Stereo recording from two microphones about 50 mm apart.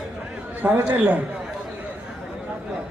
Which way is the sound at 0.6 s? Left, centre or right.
Right.